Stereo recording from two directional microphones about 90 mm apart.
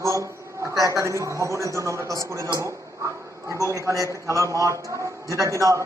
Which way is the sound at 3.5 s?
35° right (ahead or behind).